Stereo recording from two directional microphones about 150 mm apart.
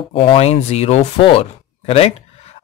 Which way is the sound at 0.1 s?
40° left (ahead or behind).